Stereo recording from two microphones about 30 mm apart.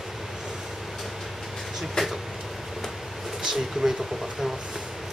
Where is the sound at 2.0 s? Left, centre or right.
Left.